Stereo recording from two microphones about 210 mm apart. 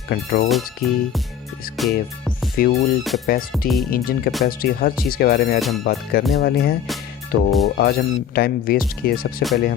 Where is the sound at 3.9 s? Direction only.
45° left (ahead or behind).